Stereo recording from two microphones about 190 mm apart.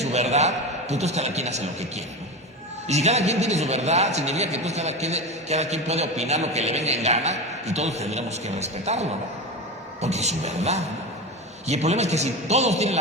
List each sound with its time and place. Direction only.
0.0 s a man's voice: 35° right (ahead or behind)
2.8 s a man's voice: 35° right (ahead or behind)